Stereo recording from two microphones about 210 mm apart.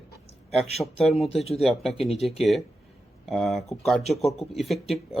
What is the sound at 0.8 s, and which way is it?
Speech, centre (ahead or behind).